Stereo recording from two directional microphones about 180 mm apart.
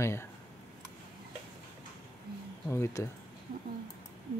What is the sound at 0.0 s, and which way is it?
Speech, 15° left (ahead or behind).